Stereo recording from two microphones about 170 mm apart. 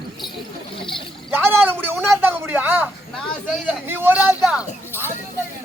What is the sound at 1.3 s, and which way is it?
Speech, 10° right (ahead or behind).